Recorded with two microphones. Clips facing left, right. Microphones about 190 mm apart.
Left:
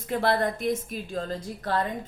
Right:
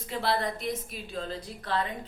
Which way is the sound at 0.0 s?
50° left (ahead or behind).